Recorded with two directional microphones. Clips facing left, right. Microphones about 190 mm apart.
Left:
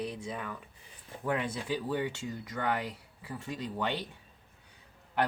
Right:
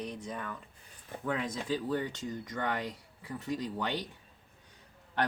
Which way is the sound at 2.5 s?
5° left (ahead or behind).